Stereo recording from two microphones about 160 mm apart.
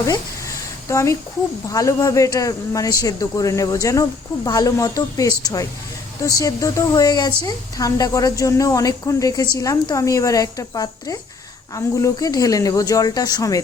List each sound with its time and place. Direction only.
0.9 s a woman's voice: 20° left (ahead or behind)